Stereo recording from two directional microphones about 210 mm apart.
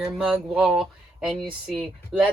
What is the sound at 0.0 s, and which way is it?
A woman's voice, 5° right (ahead or behind).